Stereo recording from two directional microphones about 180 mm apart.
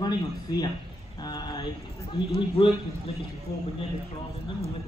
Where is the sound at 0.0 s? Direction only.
25° left (ahead or behind).